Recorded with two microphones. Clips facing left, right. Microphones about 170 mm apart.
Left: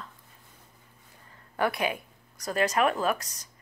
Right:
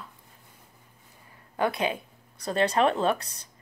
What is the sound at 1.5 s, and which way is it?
Speech, 20° right (ahead or behind).